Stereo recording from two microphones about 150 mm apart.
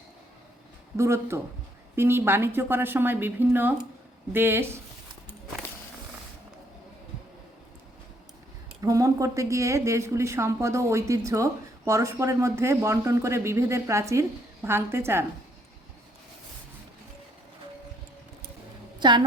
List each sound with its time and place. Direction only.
0.9 s a woman's voice: 20° right (ahead or behind)
8.8 s speech: 25° right (ahead or behind)
18.9 s a woman's voice: 30° right (ahead or behind)